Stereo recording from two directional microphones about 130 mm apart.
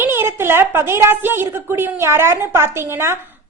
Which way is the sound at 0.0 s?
15° right (ahead or behind).